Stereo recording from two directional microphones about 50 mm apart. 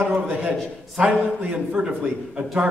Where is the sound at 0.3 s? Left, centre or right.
Right.